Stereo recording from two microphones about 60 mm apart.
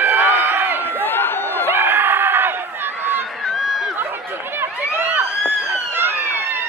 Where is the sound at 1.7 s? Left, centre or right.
Right.